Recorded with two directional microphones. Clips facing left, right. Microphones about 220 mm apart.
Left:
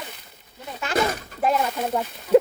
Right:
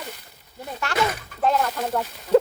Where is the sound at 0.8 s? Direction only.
20° left (ahead or behind).